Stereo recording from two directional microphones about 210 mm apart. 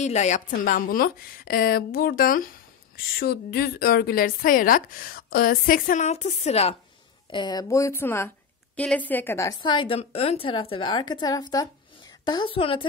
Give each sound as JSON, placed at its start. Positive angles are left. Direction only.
{"t": 0.0, "sound": "a woman's voice", "side_deg": 35}